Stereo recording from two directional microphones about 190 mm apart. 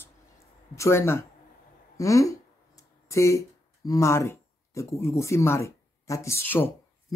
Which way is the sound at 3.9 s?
15° left (ahead or behind).